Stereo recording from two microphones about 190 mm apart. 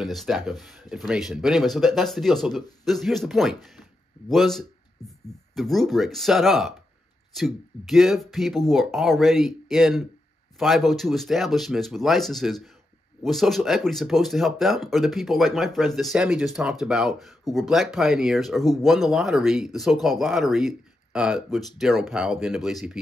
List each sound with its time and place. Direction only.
0.0 s speech: centre (ahead or behind)